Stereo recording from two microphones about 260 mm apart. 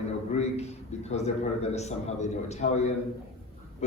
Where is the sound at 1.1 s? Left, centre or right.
Left.